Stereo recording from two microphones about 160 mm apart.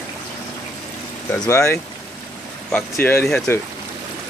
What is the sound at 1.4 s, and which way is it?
Speech, 15° left (ahead or behind).